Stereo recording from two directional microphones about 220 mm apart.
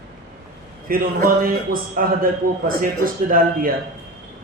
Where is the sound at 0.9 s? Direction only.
40° right (ahead or behind).